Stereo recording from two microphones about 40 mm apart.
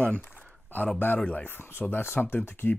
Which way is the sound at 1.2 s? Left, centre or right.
Left.